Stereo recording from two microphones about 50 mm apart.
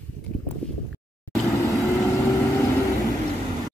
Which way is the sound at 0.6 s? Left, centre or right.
Left.